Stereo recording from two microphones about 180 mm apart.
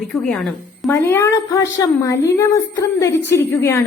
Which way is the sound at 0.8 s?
15° left (ahead or behind).